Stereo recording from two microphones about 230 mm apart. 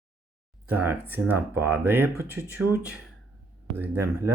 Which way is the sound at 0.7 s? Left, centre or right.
Centre.